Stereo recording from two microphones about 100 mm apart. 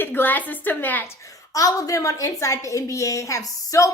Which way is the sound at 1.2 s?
35° left (ahead or behind).